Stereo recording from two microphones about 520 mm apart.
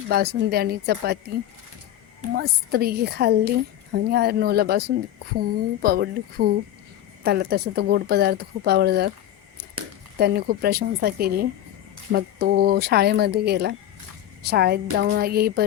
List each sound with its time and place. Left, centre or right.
0.1 s a woman's voice: centre